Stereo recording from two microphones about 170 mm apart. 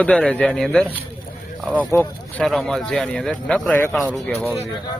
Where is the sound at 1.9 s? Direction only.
10° left (ahead or behind).